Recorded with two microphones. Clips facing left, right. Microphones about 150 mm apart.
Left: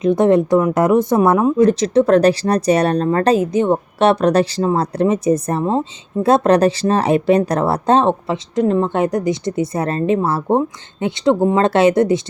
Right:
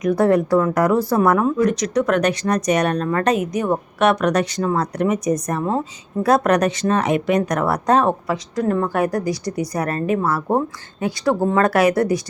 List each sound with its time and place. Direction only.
0.0 s speech: 25° left (ahead or behind)